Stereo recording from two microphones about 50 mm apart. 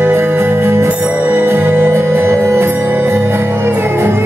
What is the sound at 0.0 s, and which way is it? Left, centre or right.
Music, right.